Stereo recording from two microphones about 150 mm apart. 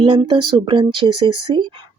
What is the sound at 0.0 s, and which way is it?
Speech, 35° right (ahead or behind).